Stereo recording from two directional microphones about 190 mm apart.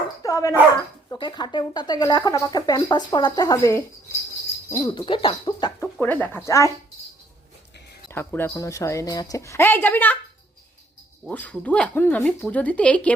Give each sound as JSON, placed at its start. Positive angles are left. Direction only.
{"t": 0.2, "sound": "dog", "side_deg": 15}
{"t": 1.1, "sound": "speech", "side_deg": 25}
{"t": 6.0, "sound": "a woman's voice", "side_deg": 10}
{"t": 8.1, "sound": "a woman's voice", "side_deg": 10}
{"t": 11.3, "sound": "a woman's voice", "side_deg": 10}